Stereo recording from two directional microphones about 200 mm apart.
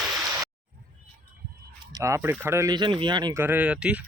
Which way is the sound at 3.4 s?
10° right (ahead or behind).